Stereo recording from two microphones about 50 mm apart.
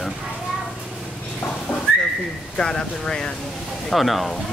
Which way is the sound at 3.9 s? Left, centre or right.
Centre.